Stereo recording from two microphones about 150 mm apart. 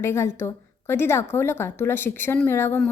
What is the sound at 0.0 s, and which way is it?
A woman's voice, 15° left (ahead or behind).